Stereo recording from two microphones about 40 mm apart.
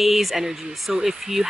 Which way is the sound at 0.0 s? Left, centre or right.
Centre.